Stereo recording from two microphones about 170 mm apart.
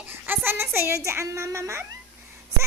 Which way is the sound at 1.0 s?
15° right (ahead or behind).